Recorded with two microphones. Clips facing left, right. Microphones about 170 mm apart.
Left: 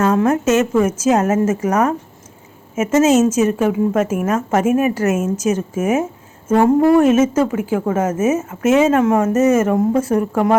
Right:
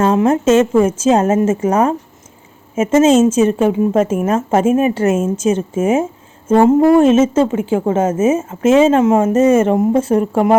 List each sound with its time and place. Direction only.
0.0 s a woman's voice: 25° right (ahead or behind)